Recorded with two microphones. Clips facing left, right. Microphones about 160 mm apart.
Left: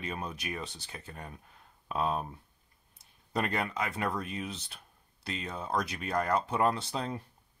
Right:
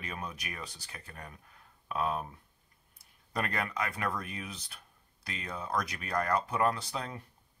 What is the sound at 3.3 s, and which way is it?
Speech, 25° left (ahead or behind).